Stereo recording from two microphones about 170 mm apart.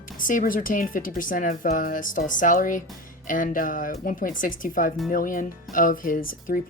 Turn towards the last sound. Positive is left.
turn(degrees=50)  # may be behind; listen again after turning